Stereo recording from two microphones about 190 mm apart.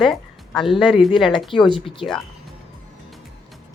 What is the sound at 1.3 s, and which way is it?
Speech, 25° left (ahead or behind).